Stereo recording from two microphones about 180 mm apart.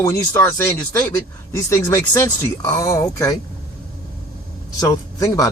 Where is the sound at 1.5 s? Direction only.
15° left (ahead or behind).